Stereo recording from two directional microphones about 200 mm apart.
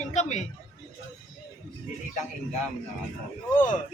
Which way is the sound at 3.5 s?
40° left (ahead or behind).